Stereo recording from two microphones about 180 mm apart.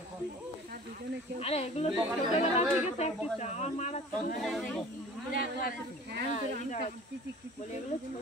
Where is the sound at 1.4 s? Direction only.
35° left (ahead or behind).